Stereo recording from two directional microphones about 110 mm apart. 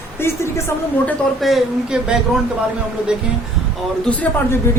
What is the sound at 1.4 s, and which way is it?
Speech, centre (ahead or behind).